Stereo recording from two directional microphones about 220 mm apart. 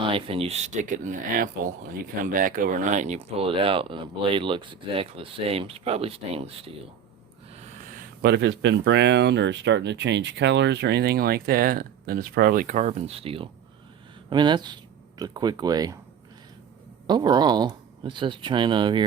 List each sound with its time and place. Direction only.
0.0 s speech: 25° right (ahead or behind)
8.2 s speech: 50° right (ahead or behind); by 16.0 s 15° right (ahead or behind)
17.1 s speech: 20° right (ahead or behind)